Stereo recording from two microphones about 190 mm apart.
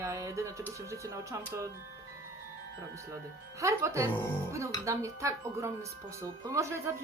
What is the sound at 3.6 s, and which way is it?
Speech, 15° right (ahead or behind).